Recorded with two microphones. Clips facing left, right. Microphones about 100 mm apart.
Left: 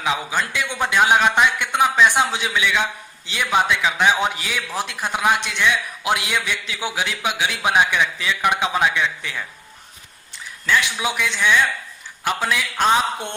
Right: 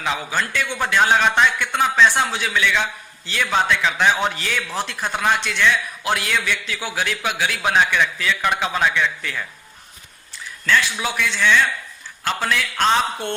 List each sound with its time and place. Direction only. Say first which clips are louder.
0.0 s a man's voice: left 1 dB; 10° left (ahead or behind)
10.7 s a man's voice: even; 15° left (ahead or behind)